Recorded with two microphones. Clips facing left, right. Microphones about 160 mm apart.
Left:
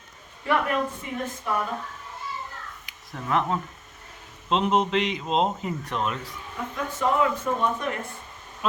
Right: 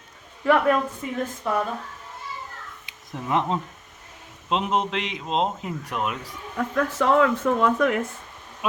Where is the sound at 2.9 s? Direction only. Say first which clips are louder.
Right 1 dB; 20° right (ahead or behind).